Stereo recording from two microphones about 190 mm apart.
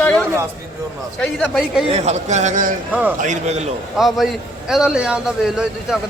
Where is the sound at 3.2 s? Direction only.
40° right (ahead or behind).